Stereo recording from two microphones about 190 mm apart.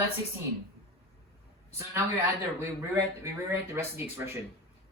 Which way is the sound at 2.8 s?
15° right (ahead or behind).